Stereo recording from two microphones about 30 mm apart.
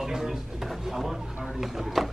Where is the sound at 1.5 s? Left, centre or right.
Centre.